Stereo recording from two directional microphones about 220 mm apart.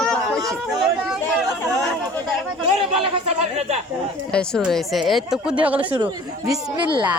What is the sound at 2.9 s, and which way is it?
Speech, 25° right (ahead or behind).